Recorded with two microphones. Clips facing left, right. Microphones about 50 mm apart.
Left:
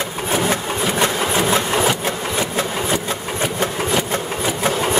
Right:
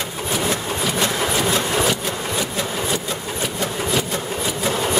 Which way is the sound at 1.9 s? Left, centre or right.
Left.